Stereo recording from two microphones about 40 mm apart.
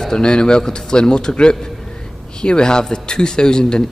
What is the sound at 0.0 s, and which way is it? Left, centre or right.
Speech, left.